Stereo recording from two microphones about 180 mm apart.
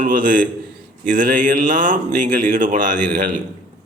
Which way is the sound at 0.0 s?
50° right (ahead or behind).